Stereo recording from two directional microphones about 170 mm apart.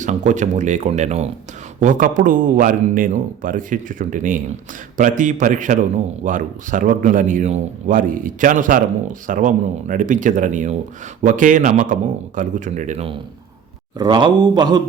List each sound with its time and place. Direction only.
0.0 s a man's voice: 45° right (ahead or behind)
14.0 s a man's voice: 25° right (ahead or behind)